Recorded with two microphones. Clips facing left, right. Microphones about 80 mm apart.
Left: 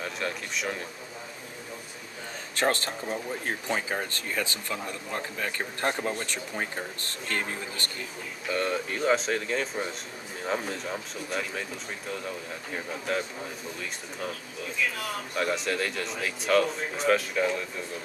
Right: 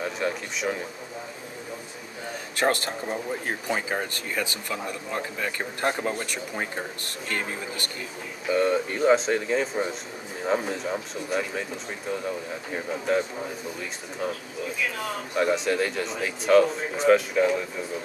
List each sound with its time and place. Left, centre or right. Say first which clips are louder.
0.0 s a man's voice: right 4 dB; centre
2.6 s a man's voice: right 2 dB; centre